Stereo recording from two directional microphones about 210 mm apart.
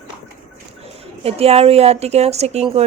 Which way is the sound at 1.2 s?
30° right (ahead or behind).